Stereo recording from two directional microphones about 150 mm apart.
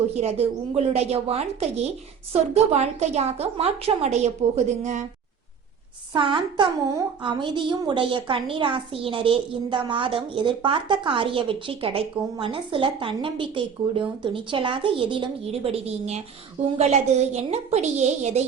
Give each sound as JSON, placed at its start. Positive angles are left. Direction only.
{"t": 0.2, "sound": "a woman's voice", "side_deg": -45}
{"t": 6.1, "sound": "a woman's voice", "side_deg": -35}